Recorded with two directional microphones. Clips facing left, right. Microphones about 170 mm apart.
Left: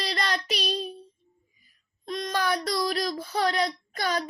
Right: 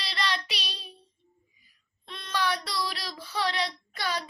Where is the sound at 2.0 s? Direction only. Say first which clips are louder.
Left 3 dB; 40° left (ahead or behind).